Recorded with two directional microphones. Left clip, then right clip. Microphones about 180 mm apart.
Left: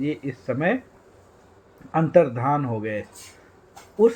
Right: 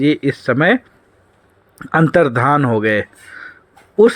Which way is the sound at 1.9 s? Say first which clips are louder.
Right 5 dB; 45° right (ahead or behind).